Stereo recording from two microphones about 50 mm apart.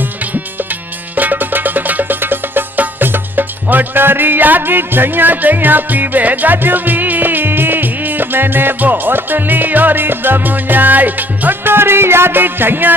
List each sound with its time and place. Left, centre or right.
0.0 s music: right